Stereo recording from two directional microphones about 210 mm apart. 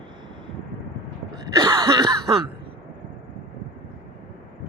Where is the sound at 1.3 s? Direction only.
20° right (ahead or behind).